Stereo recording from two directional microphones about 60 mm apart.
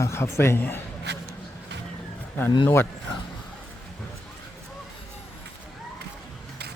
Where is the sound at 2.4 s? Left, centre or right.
Left.